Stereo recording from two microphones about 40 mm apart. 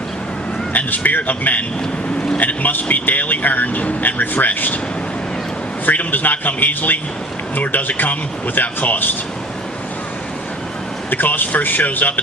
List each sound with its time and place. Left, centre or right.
0.7 s a man's voice: left
2.1 s vehicle: left
2.4 s speech: left
5.8 s speech: left
11.1 s speech: left